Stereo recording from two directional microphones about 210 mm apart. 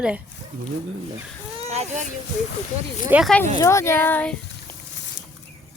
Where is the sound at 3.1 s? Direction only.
5° right (ahead or behind).